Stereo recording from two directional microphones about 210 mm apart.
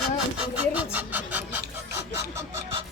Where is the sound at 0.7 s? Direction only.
5° right (ahead or behind).